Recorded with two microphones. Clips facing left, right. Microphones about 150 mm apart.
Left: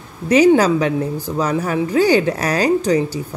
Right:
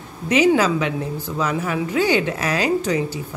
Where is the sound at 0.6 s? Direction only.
40° left (ahead or behind).